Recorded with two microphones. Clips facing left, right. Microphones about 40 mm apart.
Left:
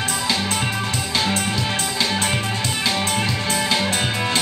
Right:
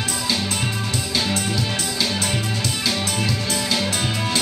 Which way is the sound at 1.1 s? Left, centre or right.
Left.